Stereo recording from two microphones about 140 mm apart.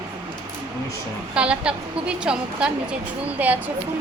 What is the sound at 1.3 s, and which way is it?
A woman's voice, 5° right (ahead or behind).